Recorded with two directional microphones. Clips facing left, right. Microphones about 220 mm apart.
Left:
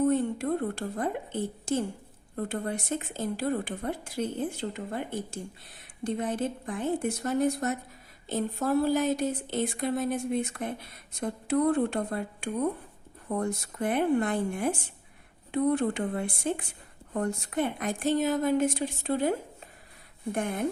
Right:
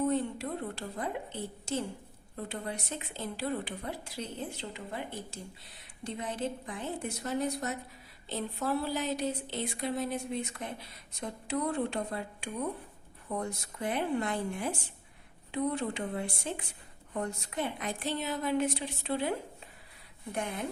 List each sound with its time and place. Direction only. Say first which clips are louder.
0.1 s speech: left 5 dB; 50° left (ahead or behind)